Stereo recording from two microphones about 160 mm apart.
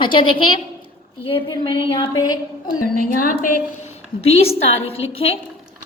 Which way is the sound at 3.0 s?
60° left (ahead or behind).